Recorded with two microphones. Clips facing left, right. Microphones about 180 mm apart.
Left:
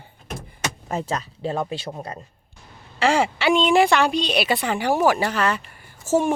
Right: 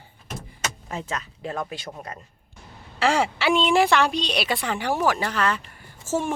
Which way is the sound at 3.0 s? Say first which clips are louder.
Left 2 dB; centre (ahead or behind).